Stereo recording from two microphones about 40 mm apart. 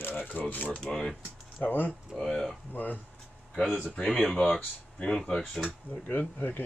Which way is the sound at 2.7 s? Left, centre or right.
Left.